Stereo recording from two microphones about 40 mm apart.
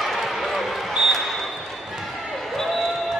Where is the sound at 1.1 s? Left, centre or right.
Centre.